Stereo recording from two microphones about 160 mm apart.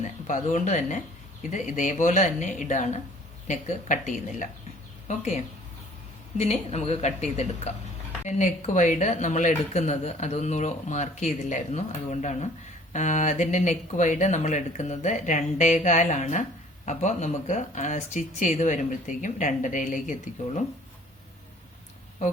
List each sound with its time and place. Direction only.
0.0 s speech: 50° left (ahead or behind)